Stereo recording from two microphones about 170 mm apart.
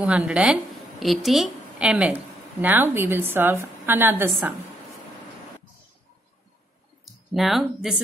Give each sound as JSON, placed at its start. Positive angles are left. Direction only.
{"t": 0.0, "sound": "a woman's voice", "side_deg": -5}
{"t": 7.1, "sound": "speech", "side_deg": 0}